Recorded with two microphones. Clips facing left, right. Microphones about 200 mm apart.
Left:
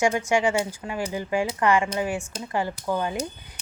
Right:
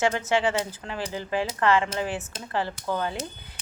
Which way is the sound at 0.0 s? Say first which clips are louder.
Left 2 dB; 15° left (ahead or behind).